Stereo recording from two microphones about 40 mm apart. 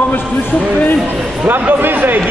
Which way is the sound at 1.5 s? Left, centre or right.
Right.